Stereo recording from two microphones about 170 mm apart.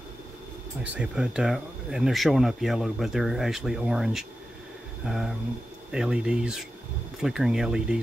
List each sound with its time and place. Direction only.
0.8 s speech: 5° right (ahead or behind)